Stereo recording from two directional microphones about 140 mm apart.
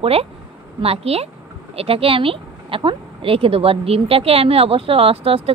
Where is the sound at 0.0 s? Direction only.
45° right (ahead or behind).